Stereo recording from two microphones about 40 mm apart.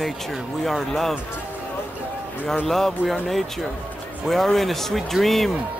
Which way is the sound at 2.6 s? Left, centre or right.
Centre.